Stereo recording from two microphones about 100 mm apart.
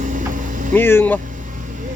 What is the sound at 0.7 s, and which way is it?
Speech, 20° left (ahead or behind).